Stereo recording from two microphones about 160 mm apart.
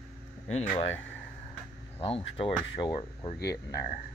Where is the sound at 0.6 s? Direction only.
40° left (ahead or behind).